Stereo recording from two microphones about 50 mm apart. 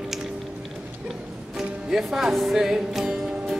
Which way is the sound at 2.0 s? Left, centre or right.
Centre.